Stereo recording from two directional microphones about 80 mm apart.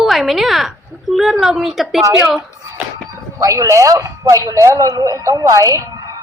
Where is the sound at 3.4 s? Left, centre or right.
Right.